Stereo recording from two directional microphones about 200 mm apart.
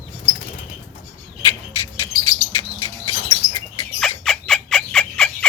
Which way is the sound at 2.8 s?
15° left (ahead or behind).